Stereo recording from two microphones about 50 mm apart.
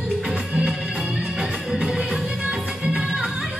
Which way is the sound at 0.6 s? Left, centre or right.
Centre.